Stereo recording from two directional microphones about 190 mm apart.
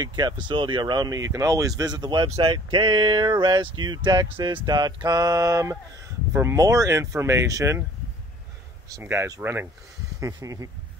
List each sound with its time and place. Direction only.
0.0 s speech: 20° right (ahead or behind)
8.9 s speech: 15° right (ahead or behind)